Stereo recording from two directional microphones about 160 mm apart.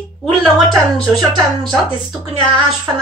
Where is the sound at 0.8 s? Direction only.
Centre (ahead or behind).